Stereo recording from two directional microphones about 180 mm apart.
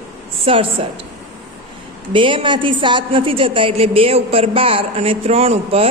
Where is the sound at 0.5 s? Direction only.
30° right (ahead or behind).